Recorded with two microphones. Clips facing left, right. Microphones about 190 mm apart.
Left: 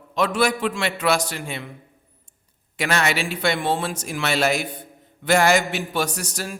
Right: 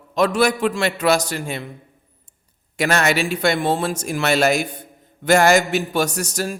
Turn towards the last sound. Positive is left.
turn(degrees=-45)  # may be behind; listen again after turning